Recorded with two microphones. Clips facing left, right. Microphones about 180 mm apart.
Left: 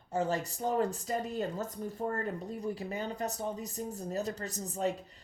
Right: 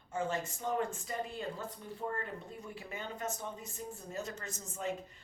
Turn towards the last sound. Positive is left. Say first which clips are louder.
# left 5 dB
turn(degrees=35)  # may be behind; listen again after turning